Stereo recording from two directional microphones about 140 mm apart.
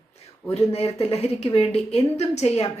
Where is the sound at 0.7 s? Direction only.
45° left (ahead or behind).